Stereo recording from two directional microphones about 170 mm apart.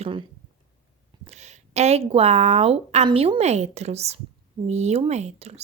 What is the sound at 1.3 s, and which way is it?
A woman's voice, 40° right (ahead or behind).